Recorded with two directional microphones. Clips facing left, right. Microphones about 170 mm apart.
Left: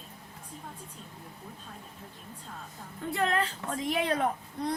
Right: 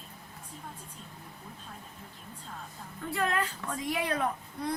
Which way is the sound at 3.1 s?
25° left (ahead or behind).